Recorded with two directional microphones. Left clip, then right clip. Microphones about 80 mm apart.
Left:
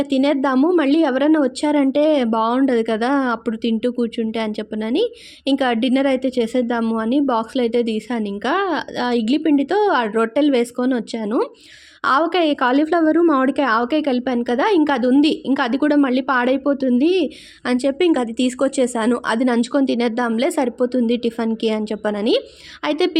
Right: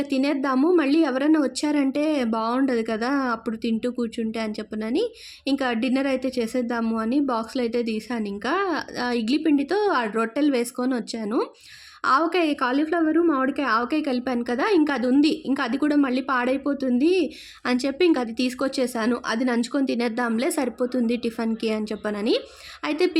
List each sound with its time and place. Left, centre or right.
0.0 s speech: left
12.7 s speech: left
17.7 s a woman's voice: centre
17.9 s a woman's voice: left